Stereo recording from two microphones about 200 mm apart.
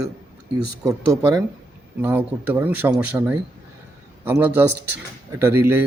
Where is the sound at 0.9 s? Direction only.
15° right (ahead or behind).